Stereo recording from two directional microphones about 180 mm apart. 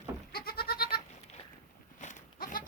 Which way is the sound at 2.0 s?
40° left (ahead or behind).